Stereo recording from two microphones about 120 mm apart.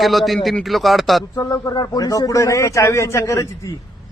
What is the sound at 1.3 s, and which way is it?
A man's voice, 25° left (ahead or behind).